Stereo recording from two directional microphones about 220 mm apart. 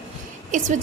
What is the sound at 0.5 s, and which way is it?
Speech, 35° right (ahead or behind).